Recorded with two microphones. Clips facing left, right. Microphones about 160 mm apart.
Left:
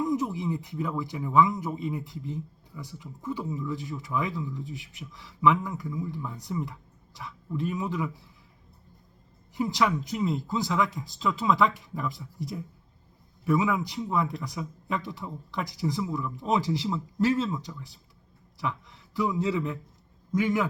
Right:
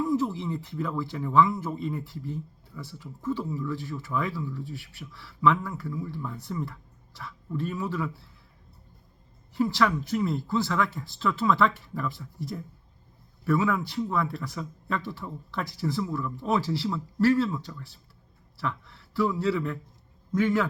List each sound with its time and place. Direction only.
0.0 s speech: 15° left (ahead or behind)
9.6 s a man's voice: 15° left (ahead or behind)